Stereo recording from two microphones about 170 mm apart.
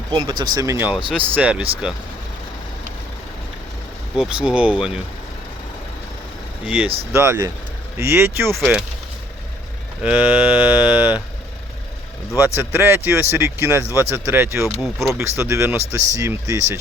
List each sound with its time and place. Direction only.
0.1 s speech: 30° right (ahead or behind); by 2.0 s 5° right (ahead or behind)
4.2 s speech: 5° right (ahead or behind)
6.7 s speech: 10° right (ahead or behind)
8.5 s speech: 5° right (ahead or behind)
10.0 s speech: 10° right (ahead or behind)
12.5 s speech: 15° right (ahead or behind)
14.8 s speech: centre (ahead or behind)
15.2 s speech: 15° right (ahead or behind)